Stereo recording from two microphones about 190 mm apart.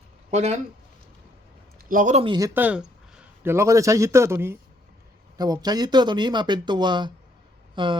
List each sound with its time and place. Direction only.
0.3 s speech: 35° right (ahead or behind)
1.9 s speech: 45° right (ahead or behind)
2.2 s speech: 25° right (ahead or behind)
2.5 s speech: 10° right (ahead or behind); by 7.9 s 25° right (ahead or behind)